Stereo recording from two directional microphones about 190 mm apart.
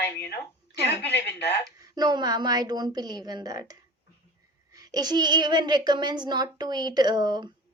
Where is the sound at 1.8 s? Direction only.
20° right (ahead or behind).